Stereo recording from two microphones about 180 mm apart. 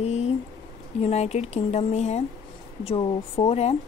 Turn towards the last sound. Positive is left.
turn(degrees=35)  # may be behind; listen again after turning